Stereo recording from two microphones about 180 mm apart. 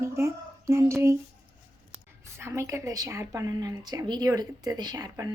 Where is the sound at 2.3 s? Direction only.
15° right (ahead or behind).